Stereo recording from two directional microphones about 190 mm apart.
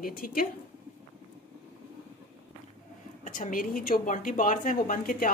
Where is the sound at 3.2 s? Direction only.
45° left (ahead or behind).